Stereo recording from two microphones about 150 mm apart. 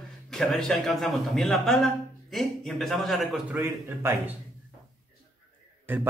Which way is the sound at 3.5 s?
15° right (ahead or behind).